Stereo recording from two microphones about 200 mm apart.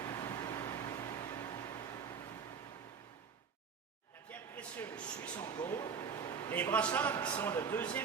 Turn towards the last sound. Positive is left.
turn(degrees=10)  # may be behind; listen again after turning